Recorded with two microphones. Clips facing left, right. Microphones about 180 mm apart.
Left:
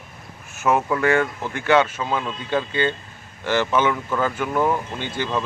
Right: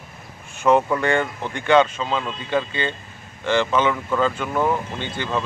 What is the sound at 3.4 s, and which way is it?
Speech, 10° left (ahead or behind).